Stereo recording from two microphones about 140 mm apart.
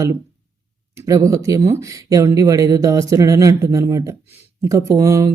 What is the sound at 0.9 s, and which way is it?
Speech, 20° right (ahead or behind).